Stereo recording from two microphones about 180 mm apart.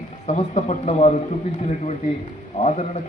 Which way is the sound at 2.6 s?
35° left (ahead or behind).